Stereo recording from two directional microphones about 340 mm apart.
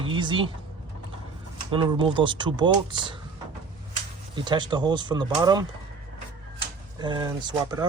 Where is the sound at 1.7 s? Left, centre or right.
Centre.